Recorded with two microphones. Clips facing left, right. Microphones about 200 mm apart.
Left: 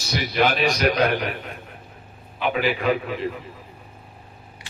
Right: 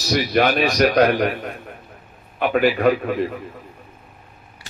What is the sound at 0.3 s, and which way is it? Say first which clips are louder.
A man's voice: right 1 dB; 55° right (ahead or behind).